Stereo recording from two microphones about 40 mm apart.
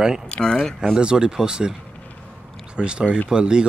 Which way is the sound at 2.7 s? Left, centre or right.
Right.